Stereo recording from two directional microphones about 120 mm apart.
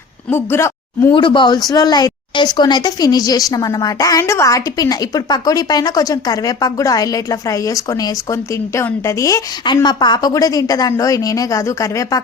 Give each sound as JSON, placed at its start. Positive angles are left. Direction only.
{"t": 0.3, "sound": "speech", "side_deg": 20}
{"t": 1.1, "sound": "a woman's voice", "side_deg": 45}